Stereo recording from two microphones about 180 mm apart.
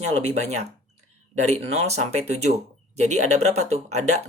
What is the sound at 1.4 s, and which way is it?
Speech, 35° right (ahead or behind).